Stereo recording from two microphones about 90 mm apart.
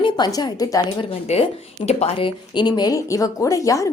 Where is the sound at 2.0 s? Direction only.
75° left (ahead or behind).